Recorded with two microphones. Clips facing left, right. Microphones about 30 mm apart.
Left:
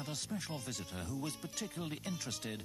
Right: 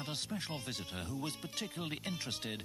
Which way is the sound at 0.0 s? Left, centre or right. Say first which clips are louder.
Right 1 dB; right.